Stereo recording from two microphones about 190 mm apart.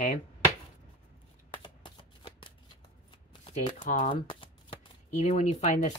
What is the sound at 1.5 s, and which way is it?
Shuffling cards, 25° left (ahead or behind).